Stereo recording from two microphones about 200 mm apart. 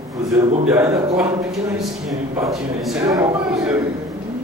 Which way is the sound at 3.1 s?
15° right (ahead or behind).